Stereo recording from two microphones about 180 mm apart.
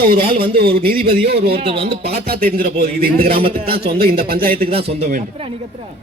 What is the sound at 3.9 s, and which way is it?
Speech, 55° right (ahead or behind).